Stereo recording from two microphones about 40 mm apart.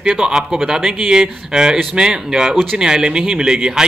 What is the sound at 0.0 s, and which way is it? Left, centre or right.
A man's voice, centre.